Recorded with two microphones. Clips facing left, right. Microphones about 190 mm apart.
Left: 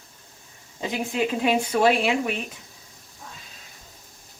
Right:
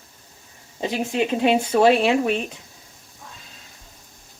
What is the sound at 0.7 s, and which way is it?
Speech, 30° right (ahead or behind).